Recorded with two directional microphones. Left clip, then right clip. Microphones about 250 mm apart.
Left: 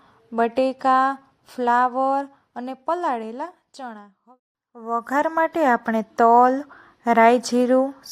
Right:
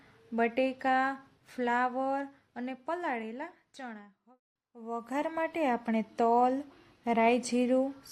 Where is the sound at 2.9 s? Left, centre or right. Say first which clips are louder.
Left 11 dB; centre.